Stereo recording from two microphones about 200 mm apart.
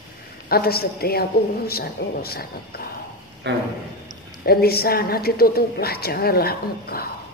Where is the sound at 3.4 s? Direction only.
60° right (ahead or behind).